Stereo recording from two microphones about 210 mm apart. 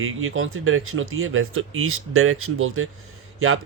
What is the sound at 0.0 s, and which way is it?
Speech, 75° right (ahead or behind).